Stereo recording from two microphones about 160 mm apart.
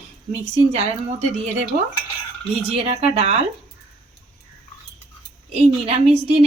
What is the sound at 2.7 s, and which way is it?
Speech, 40° right (ahead or behind).